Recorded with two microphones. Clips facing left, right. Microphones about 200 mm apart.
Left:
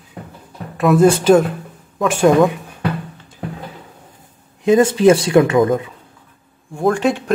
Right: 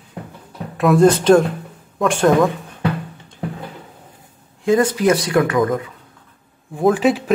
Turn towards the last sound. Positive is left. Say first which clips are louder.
# right 1 dB
turn(degrees=-5)  # may be behind; listen again after turning